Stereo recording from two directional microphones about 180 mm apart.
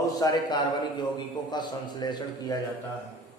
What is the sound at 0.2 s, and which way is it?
A man's voice, 25° left (ahead or behind).